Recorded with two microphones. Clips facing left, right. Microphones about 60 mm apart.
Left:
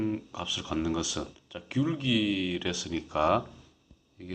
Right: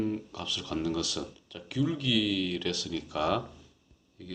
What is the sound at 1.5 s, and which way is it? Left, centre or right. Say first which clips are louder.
Speech: left 1 dB; left.